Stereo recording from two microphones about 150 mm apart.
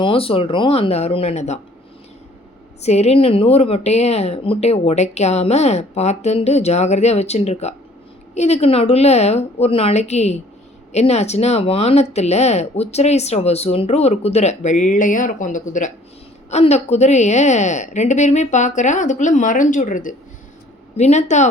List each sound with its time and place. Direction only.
0.0 s speech: 35° left (ahead or behind)
2.8 s speech: 45° left (ahead or behind)
16.5 s speech: 45° left (ahead or behind)
20.9 s speech: 50° left (ahead or behind)